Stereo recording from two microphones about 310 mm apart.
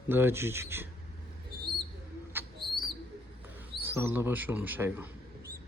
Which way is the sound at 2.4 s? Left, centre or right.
Centre.